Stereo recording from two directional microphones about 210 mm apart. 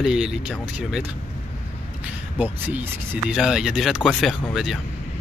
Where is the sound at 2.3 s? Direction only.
10° right (ahead or behind).